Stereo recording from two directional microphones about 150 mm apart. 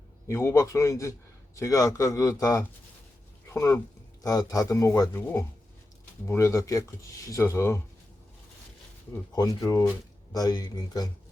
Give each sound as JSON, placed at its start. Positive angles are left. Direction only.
{"t": 0.3, "sound": "speech", "side_deg": 20}
{"t": 9.3, "sound": "speech", "side_deg": 25}